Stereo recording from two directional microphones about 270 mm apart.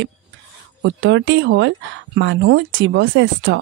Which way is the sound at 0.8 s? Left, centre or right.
Right.